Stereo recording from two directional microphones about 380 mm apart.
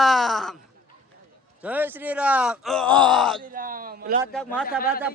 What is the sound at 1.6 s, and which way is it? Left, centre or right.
Speech, centre.